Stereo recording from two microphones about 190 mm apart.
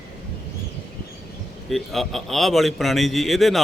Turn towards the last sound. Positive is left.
turn(degrees=0)  # may be behind; listen again after turning